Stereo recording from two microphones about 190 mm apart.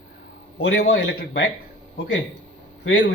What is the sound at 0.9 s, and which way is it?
Speech, 75° left (ahead or behind).